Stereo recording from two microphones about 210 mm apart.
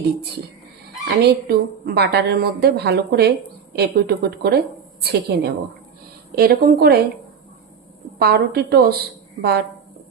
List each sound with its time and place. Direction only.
1.0 s a woman's voice: 50° right (ahead or behind)
8.2 s a woman's voice: 50° right (ahead or behind)